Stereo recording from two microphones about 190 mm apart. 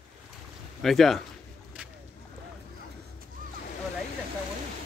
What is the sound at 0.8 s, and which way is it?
Speech, centre (ahead or behind).